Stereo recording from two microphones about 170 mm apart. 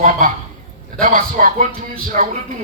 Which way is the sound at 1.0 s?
50° right (ahead or behind).